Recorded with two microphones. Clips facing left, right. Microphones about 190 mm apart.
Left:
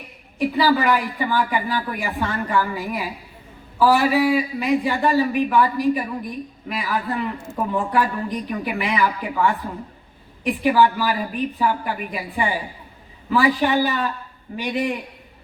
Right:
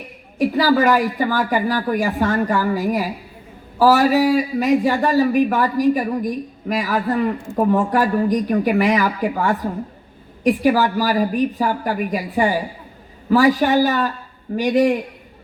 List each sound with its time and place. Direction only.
0.3 s a man's voice: 45° right (ahead or behind)